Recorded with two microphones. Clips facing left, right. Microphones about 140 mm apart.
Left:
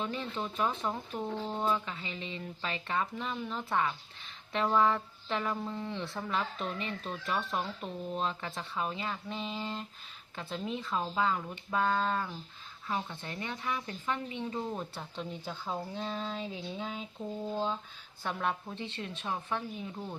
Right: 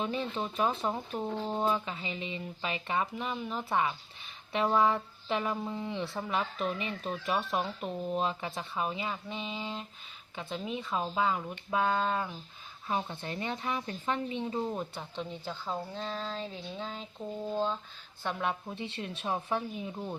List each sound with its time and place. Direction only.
0.0 s speech: 15° right (ahead or behind)
12.9 s speech: 25° right (ahead or behind)
14.9 s speech: 5° left (ahead or behind); by 19.9 s 15° right (ahead or behind)